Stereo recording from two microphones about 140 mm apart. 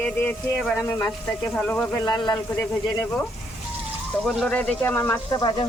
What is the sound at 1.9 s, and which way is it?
Speech, 30° left (ahead or behind).